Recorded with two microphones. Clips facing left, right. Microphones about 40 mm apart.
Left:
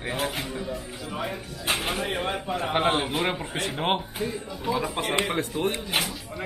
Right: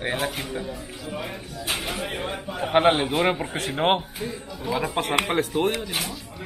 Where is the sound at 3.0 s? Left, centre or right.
Centre.